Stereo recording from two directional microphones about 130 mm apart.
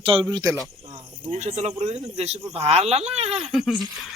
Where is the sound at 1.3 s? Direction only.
60° right (ahead or behind).